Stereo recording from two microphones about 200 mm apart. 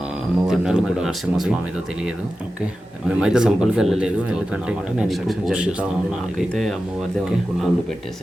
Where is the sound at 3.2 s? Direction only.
5° right (ahead or behind).